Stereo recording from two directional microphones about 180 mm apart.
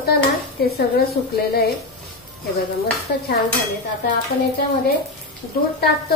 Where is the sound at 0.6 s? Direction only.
60° left (ahead or behind).